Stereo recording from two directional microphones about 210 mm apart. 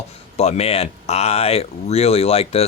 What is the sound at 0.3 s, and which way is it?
Speech, 30° left (ahead or behind).